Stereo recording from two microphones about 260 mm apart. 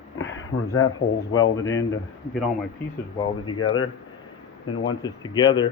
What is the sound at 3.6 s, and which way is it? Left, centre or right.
Speech, left.